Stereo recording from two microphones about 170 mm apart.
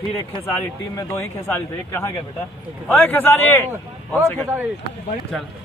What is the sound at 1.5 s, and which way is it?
A man's voice, 15° left (ahead or behind).